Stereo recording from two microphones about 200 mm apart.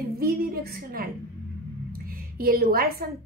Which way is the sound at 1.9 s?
45° right (ahead or behind).